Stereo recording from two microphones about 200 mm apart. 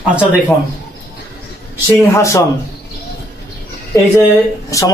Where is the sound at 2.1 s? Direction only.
15° left (ahead or behind).